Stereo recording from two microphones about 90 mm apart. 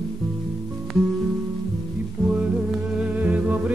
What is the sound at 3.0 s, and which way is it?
Humming, 15° right (ahead or behind).